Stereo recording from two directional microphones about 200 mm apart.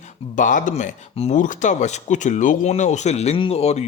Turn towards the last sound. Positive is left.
turn(degrees=30)  # may be behind; listen again after turning